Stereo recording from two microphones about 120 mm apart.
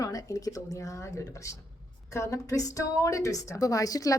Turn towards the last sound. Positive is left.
turn(degrees=30)  # may be behind; listen again after turning